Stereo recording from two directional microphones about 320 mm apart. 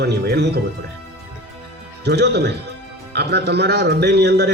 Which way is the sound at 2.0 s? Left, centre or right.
Right.